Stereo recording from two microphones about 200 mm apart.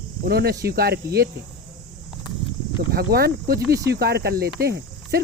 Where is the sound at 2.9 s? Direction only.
50° right (ahead or behind).